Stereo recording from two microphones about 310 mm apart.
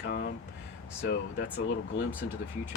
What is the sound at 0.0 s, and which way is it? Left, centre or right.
Speech, left.